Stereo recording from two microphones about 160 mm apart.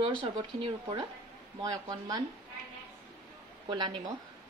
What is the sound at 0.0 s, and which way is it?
Speech, 35° right (ahead or behind).